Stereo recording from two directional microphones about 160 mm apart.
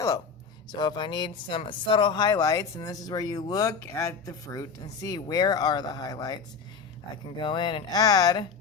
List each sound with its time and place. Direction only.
0.7 s speech: 25° left (ahead or behind)